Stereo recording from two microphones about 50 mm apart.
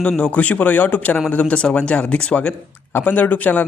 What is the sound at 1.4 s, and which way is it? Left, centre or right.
Speech, centre.